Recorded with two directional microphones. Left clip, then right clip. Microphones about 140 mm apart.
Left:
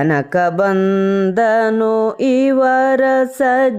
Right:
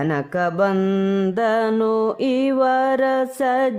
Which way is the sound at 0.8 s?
20° left (ahead or behind).